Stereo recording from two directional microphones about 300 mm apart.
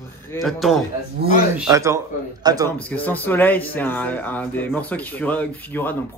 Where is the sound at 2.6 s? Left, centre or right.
Centre.